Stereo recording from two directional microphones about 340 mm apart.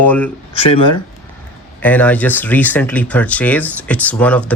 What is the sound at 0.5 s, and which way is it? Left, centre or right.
Speech, centre.